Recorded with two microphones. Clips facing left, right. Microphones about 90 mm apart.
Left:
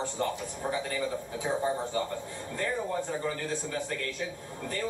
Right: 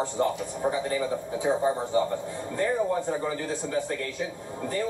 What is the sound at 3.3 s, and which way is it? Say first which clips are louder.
Speech: right 3 dB; 20° right (ahead or behind).